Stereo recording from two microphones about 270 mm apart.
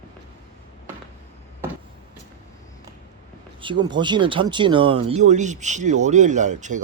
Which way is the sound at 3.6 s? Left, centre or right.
Centre.